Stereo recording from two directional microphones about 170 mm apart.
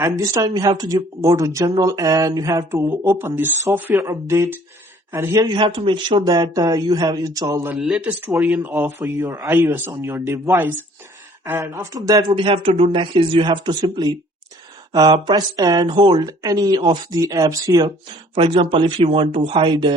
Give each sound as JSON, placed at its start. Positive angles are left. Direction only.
{"t": 0.0, "sound": "speech", "side_deg": -20}
{"t": 7.8, "sound": "speech", "side_deg": -5}
{"t": 12.4, "sound": "speech", "side_deg": -35}